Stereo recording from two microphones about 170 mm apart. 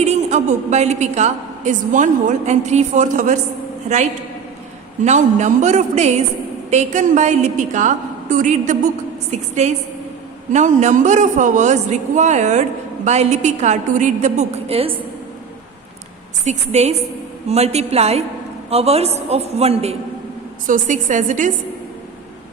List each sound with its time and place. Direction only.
0.0 s a woman's voice: 40° right (ahead or behind)
16.4 s a man's voice: 40° right (ahead or behind)
20.7 s a woman's voice: 50° right (ahead or behind)